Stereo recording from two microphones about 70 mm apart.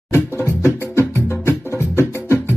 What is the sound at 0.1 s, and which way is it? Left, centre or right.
Music, left.